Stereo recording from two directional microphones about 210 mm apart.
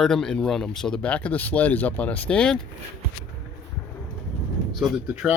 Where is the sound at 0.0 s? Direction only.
Centre (ahead or behind).